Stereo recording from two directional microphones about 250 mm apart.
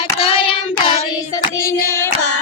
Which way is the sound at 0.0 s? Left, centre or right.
Left.